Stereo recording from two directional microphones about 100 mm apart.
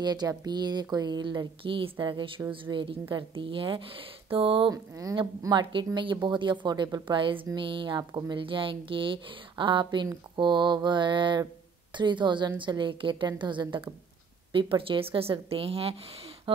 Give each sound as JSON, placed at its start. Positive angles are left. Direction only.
{"t": 0.0, "sound": "a woman's voice", "side_deg": -45}
{"t": 4.6, "sound": "speech", "side_deg": -35}
{"t": 5.4, "sound": "a woman's voice", "side_deg": -50}
{"t": 8.0, "sound": "speech", "side_deg": -30}
{"t": 8.3, "sound": "a woman's voice", "side_deg": -60}
{"t": 16.5, "sound": "a sound", "side_deg": -65}